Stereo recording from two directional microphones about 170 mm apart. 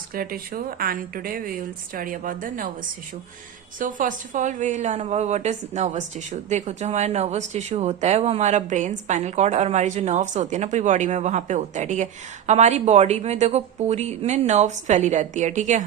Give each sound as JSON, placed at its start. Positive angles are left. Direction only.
{"t": 0.1, "sound": "speech", "side_deg": -60}
{"t": 3.8, "sound": "a woman's voice", "side_deg": -50}